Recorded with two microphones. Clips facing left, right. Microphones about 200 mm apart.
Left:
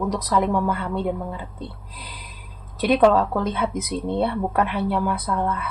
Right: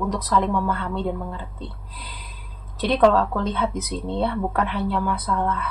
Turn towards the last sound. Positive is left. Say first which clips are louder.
# even
turn(degrees=10)  # may be behind; listen again after turning